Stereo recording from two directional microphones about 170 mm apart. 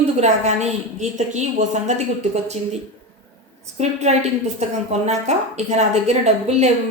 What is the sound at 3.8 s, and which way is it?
Speech, 40° right (ahead or behind).